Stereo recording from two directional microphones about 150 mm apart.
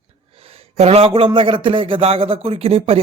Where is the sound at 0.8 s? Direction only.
45° right (ahead or behind).